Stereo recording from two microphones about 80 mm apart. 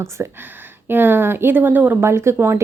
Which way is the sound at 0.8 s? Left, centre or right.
Right.